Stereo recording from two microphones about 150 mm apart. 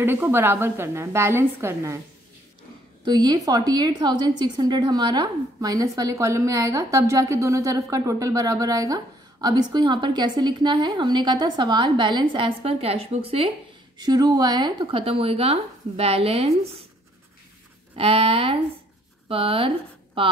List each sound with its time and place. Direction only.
0.0 s a woman's voice: 15° right (ahead or behind)
3.1 s a woman's voice: 25° right (ahead or behind)
13.9 s speech: 25° right (ahead or behind); by 16.5 s 40° right (ahead or behind)
17.9 s speech: 40° right (ahead or behind)